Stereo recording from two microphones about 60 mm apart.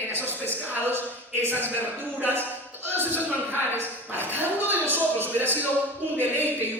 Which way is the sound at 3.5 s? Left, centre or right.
Right.